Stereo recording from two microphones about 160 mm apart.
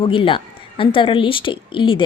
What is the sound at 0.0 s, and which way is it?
A woman's voice, 30° left (ahead or behind).